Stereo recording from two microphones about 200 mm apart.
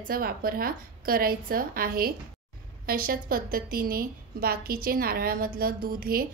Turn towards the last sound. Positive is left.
turn(degrees=-45)  # may be behind; listen again after turning